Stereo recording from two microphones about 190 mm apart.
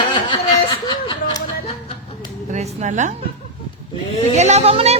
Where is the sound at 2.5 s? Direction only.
40° right (ahead or behind).